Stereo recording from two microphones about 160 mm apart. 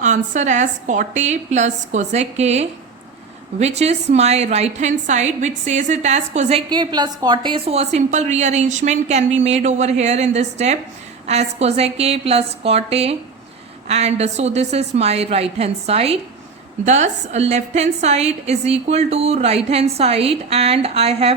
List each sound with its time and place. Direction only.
0.0 s a woman's voice: 50° right (ahead or behind)
6.7 s a woman's voice: 25° right (ahead or behind)